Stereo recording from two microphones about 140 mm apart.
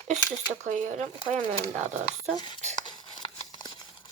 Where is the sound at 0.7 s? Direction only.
55° right (ahead or behind).